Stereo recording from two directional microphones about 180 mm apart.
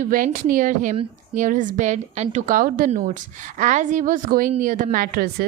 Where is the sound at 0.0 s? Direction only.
45° right (ahead or behind).